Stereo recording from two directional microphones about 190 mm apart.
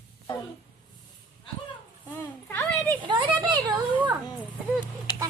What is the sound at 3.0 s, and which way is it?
Speech, 25° right (ahead or behind).